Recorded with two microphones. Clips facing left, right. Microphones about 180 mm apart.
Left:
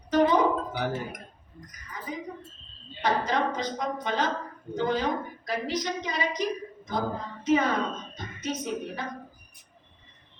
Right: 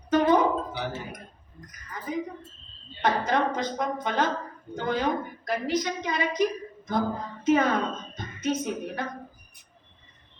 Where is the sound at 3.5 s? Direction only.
55° right (ahead or behind).